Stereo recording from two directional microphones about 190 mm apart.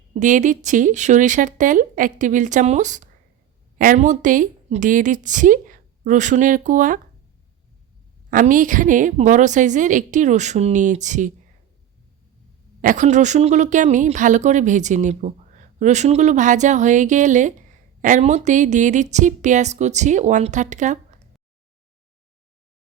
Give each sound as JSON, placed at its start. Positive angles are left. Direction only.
{"t": 0.1, "sound": "a woman's voice", "side_deg": -40}
{"t": 8.3, "sound": "speech", "side_deg": -45}
{"t": 12.8, "sound": "speech", "side_deg": -40}